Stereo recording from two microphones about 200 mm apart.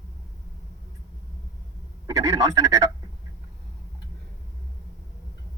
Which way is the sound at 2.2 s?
15° right (ahead or behind).